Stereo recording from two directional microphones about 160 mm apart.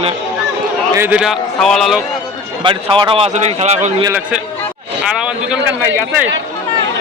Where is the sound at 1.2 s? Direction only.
Centre (ahead or behind).